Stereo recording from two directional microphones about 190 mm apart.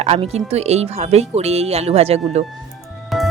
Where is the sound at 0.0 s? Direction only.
35° right (ahead or behind).